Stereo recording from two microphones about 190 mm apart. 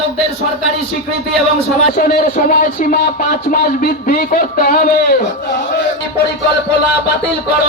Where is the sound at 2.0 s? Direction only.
50° left (ahead or behind).